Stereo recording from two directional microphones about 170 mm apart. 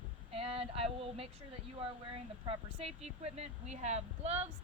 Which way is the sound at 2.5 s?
35° right (ahead or behind).